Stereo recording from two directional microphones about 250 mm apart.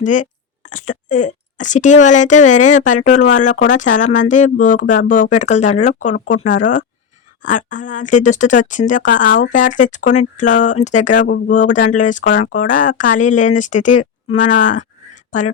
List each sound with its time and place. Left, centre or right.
0.0 s speech: left